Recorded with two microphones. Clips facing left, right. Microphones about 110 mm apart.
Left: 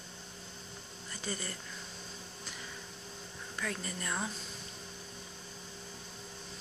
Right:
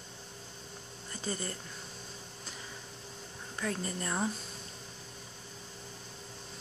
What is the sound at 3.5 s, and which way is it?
Speech, 30° right (ahead or behind).